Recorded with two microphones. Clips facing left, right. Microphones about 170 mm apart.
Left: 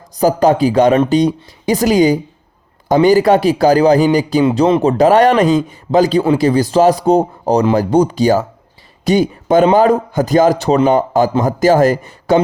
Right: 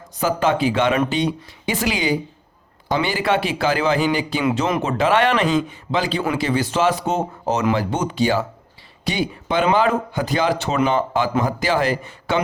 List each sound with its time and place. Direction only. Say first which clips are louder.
0.1 s a man's voice: left 8 dB; 40° left (ahead or behind)